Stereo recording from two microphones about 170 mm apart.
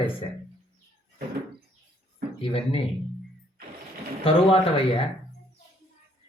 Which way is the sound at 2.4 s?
30° left (ahead or behind).